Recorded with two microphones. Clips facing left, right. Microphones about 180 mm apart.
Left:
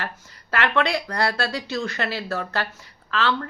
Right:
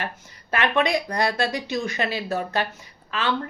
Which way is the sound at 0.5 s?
15° right (ahead or behind).